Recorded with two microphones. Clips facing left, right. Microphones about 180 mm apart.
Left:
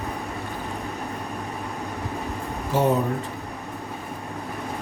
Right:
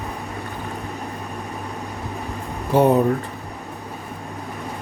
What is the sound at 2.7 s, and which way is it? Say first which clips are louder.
Speech: right 6 dB; 55° right (ahead or behind).